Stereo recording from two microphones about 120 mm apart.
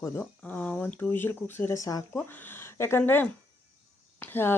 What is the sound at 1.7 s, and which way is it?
Speech, 30° left (ahead or behind).